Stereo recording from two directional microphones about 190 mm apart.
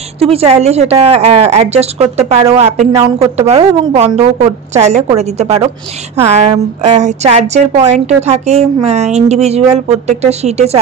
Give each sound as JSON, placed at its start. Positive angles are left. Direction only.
{"t": 0.2, "sound": "a woman's voice", "side_deg": -30}
{"t": 2.9, "sound": "speech", "side_deg": -20}
{"t": 3.3, "sound": "a woman's voice", "side_deg": -35}